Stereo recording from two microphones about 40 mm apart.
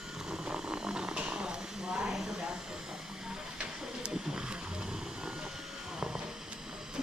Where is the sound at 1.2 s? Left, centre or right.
Right.